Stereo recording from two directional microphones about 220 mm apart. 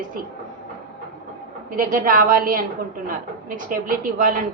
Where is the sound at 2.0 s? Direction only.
40° right (ahead or behind).